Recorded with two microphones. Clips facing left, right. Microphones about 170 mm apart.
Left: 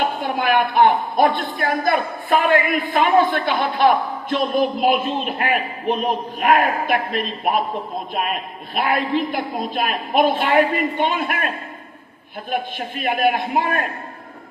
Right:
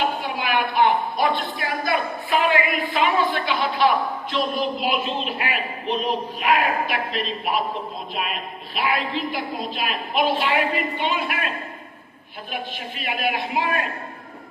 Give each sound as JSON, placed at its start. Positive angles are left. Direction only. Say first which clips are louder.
{"t": 0.0, "sound": "a woman's voice", "louder": "left 4 dB", "side_deg": 50}
{"t": 13.0, "sound": "a woman's voice", "louder": "left 7 dB", "side_deg": 50}